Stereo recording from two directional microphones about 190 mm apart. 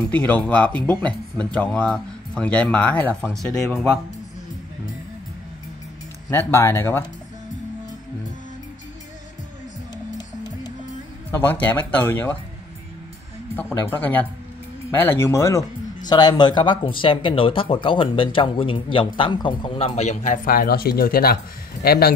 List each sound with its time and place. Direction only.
0.1 s speech: 10° left (ahead or behind)
6.3 s speech: 15° left (ahead or behind)
10.1 s music: 20° left (ahead or behind)
11.3 s speech: 10° left (ahead or behind)
13.6 s speech: 10° left (ahead or behind); by 22.1 s 55° left (ahead or behind)